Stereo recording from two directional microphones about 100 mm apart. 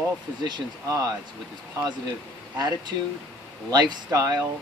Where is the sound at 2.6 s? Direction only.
40° right (ahead or behind).